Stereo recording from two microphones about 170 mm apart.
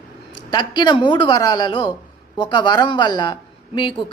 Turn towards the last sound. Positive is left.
turn(degrees=30)  # may be behind; listen again after turning